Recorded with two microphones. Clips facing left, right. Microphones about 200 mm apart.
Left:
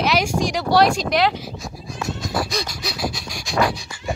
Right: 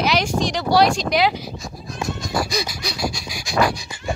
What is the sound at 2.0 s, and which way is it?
Pant, 5° left (ahead or behind).